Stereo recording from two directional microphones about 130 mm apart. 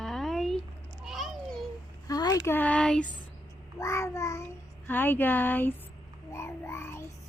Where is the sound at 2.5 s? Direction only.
10° left (ahead or behind).